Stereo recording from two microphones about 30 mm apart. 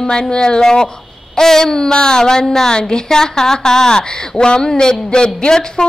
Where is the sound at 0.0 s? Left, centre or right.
Left.